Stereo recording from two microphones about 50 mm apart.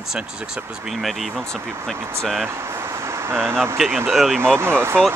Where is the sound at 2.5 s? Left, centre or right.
Right.